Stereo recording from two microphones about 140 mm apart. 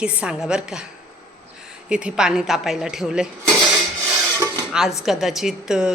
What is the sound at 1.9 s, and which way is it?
A woman's voice, 5° right (ahead or behind).